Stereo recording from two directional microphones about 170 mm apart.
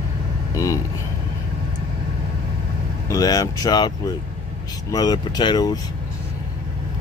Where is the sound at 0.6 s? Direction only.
20° left (ahead or behind).